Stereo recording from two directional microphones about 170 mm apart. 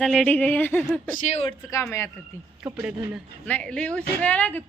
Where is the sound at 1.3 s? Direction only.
35° left (ahead or behind).